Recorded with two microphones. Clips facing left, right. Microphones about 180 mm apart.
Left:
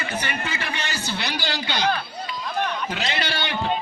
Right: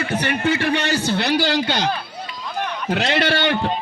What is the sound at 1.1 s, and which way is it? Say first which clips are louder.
Speech: right 9 dB; 50° right (ahead or behind).